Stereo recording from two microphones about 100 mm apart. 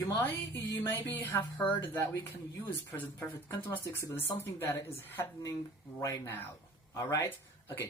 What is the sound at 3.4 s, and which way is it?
Speech, 30° left (ahead or behind).